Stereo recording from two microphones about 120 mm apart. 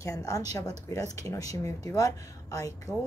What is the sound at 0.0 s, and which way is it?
A woman's voice, 30° left (ahead or behind).